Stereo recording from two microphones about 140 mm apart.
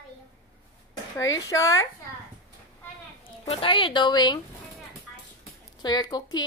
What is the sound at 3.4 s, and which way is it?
Speech, 40° left (ahead or behind).